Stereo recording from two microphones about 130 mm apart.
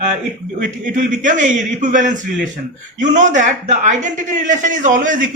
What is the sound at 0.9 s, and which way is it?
A man's voice, 80° right.